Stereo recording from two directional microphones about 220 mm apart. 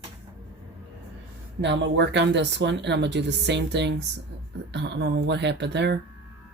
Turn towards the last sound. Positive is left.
turn(degrees=-50)  # may be behind; listen again after turning